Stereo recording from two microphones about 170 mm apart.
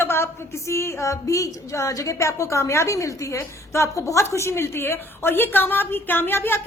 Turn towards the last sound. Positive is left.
turn(degrees=15)  # may be behind; listen again after turning